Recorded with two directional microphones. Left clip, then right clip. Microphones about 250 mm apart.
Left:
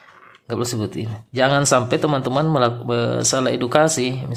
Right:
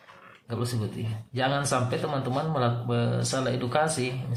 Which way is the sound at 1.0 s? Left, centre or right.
Left.